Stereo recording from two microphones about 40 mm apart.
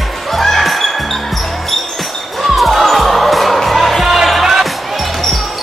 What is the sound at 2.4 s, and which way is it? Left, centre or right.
Music, centre.